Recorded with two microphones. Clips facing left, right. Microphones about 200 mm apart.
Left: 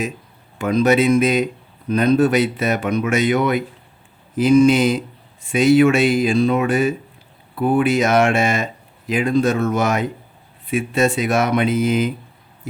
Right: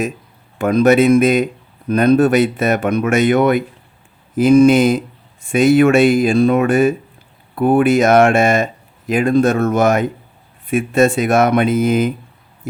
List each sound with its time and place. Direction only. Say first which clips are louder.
0.6 s speech: right 4 dB; 50° right (ahead or behind)